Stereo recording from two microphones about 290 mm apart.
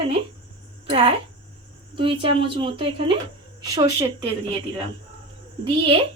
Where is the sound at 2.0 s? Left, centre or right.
Centre.